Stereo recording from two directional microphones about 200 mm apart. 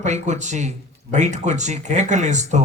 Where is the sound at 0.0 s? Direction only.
35° right (ahead or behind).